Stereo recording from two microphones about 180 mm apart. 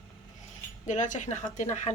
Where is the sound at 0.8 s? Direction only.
45° left (ahead or behind).